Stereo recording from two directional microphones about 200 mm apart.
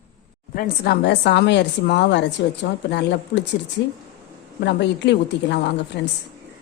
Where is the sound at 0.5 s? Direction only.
55° left (ahead or behind).